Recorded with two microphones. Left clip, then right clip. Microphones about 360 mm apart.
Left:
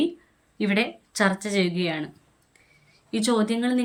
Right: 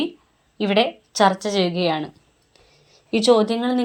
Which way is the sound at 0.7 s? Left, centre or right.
Centre.